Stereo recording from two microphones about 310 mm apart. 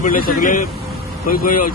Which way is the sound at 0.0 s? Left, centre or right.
Left.